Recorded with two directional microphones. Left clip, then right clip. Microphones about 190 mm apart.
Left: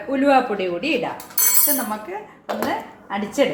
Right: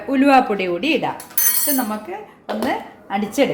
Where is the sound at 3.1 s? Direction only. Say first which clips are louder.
Right 3 dB; 55° right (ahead or behind).